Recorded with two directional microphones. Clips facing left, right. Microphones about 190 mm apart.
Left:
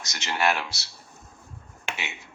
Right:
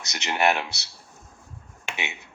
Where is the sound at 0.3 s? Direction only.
20° right (ahead or behind).